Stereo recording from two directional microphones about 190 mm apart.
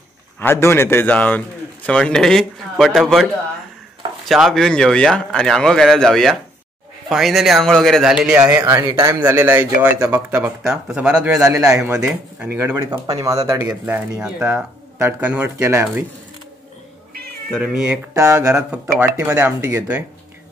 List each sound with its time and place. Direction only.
0.4 s a man's voice: 10° left (ahead or behind)
4.3 s speech: centre (ahead or behind)
17.5 s speech: centre (ahead or behind)
18.1 s speech: 15° right (ahead or behind)
18.5 s speech: 5° right (ahead or behind)